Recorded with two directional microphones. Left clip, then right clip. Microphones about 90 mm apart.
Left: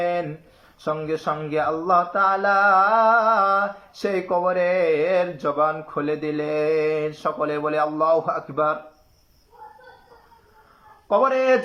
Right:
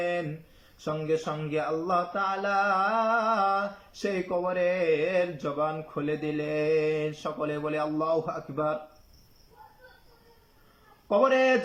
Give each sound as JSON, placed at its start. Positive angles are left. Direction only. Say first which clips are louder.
{"t": 0.8, "sound": "mantra", "louder": "left 3 dB", "side_deg": -35}
{"t": 11.1, "sound": "mantra", "louder": "left 4 dB", "side_deg": -40}